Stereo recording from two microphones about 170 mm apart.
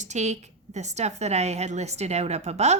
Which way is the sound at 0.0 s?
40° right (ahead or behind).